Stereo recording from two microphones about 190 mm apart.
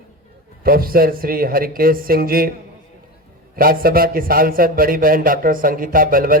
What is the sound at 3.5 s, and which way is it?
A man's voice, 50° right (ahead or behind).